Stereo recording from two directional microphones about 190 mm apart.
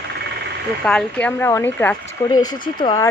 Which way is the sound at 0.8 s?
5° left (ahead or behind).